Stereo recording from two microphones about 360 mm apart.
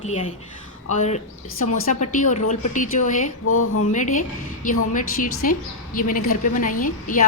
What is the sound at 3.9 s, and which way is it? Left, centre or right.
A woman's voice, left.